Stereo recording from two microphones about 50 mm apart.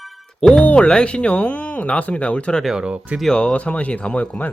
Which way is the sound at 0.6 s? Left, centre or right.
Left.